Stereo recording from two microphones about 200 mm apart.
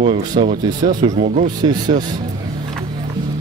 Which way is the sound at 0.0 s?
30° right (ahead or behind).